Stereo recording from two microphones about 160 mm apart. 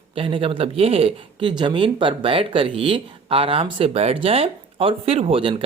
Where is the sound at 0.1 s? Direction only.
35° right (ahead or behind).